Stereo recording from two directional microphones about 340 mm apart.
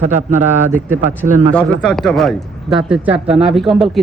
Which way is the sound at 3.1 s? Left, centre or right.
Centre.